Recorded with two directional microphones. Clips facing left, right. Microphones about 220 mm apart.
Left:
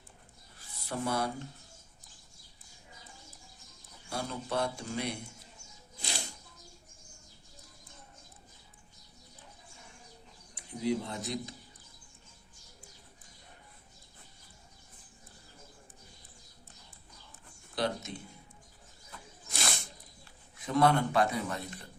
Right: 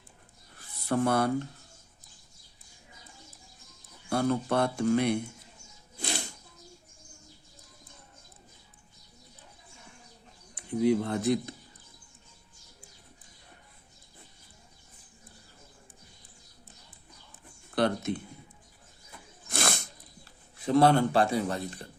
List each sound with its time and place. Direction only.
0.9 s speech: 55° right (ahead or behind)
4.1 s speech: 60° right (ahead or behind)
6.0 s music: 55° right (ahead or behind)
10.8 s speech: 60° right (ahead or behind)
17.7 s speech: 60° right (ahead or behind)
19.5 s a sound: 50° right (ahead or behind)
20.6 s speech: 30° right (ahead or behind)